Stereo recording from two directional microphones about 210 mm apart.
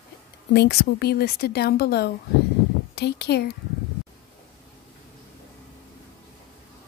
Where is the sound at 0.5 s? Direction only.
50° left (ahead or behind).